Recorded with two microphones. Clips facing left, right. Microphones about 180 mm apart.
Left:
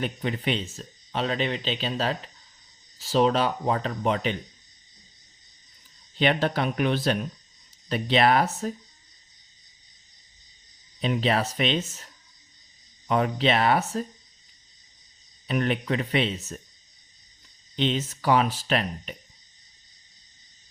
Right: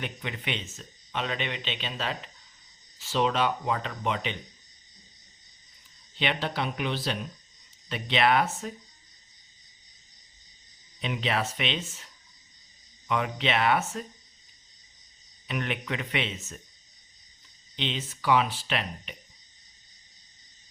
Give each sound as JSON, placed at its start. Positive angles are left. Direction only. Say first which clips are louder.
{"t": 0.0, "sound": "speech", "louder": "left 7 dB", "side_deg": 40}
{"t": 6.1, "sound": "speech", "louder": "left 6 dB", "side_deg": 45}
{"t": 11.0, "sound": "speech", "louder": "left 5 dB", "side_deg": 40}
{"t": 15.4, "sound": "speech", "louder": "left 6 dB", "side_deg": 35}
{"t": 17.7, "sound": "speech", "louder": "left 8 dB", "side_deg": 45}